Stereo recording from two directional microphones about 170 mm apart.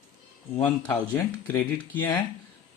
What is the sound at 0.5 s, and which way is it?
Speech, 15° left (ahead or behind).